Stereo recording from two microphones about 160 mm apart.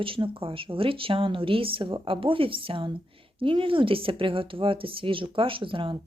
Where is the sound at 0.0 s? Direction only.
35° right (ahead or behind).